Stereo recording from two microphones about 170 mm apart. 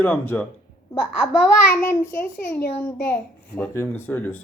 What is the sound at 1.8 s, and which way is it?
A child's voice, 10° left (ahead or behind).